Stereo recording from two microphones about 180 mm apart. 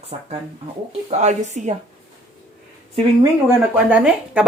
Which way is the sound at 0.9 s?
40° right (ahead or behind).